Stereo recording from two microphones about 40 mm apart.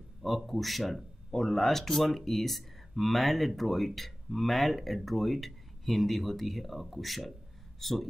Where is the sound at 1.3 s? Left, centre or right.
Centre.